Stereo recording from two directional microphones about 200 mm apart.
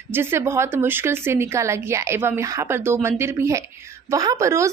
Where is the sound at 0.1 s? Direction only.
10° right (ahead or behind).